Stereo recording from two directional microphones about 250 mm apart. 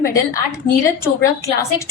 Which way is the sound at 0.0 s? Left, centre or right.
Centre.